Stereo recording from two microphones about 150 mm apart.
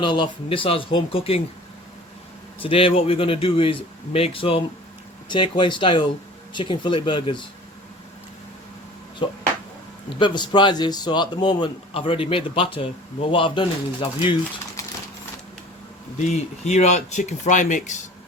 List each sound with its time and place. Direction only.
0.0 s speech: 30° left (ahead or behind)
2.6 s speech: 40° left (ahead or behind)
9.2 s speech: 35° left (ahead or behind)
16.3 s speech: 50° left (ahead or behind)